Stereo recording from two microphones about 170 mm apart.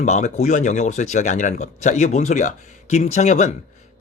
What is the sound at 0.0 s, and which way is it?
A man's voice, 45° left (ahead or behind).